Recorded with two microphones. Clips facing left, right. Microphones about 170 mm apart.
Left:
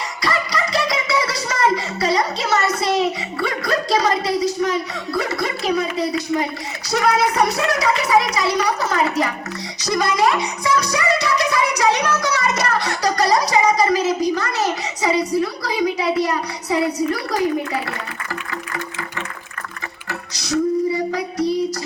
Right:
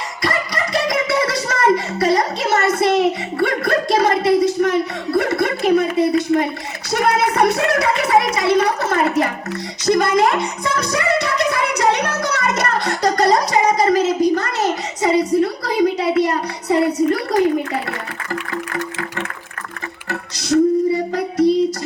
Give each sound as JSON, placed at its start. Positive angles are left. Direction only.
{"t": 0.2, "sound": "a child's voice", "side_deg": -50}
{"t": 10.9, "sound": "music", "side_deg": -55}
{"t": 20.1, "sound": "a sound", "side_deg": -55}
{"t": 21.3, "sound": "child singing", "side_deg": -25}